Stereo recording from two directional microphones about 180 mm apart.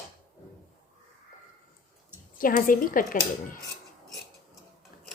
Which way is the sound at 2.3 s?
50° left (ahead or behind).